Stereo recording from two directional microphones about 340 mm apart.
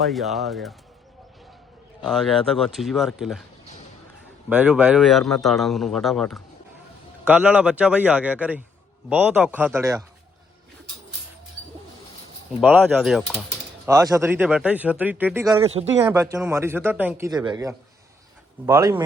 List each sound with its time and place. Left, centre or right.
0.0 s a man's voice: centre
2.0 s a man's voice: centre
4.4 s a man's voice: centre
12.6 s a man's voice: centre
15.6 s speech: centre